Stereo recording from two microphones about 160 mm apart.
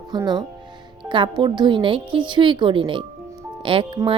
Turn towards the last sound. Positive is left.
turn(degrees=-30)  # may be behind; listen again after turning